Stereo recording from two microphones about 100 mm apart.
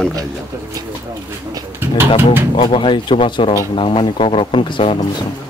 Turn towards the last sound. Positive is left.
turn(degrees=60)  # may be behind; listen again after turning